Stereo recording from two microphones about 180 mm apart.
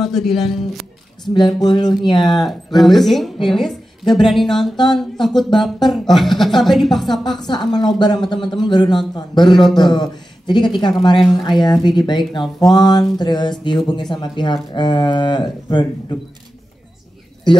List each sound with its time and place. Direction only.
0.0 s speech: centre (ahead or behind)
1.2 s speech: 25° left (ahead or behind)
2.3 s speech: centre (ahead or behind)
7.2 s speech: 25° left (ahead or behind)